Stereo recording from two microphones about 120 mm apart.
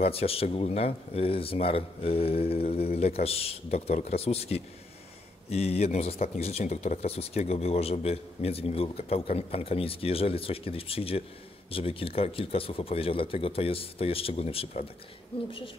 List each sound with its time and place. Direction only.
0.0 s speech: 55° left (ahead or behind)